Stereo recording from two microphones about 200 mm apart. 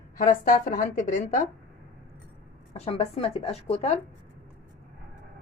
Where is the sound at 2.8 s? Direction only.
30° left (ahead or behind).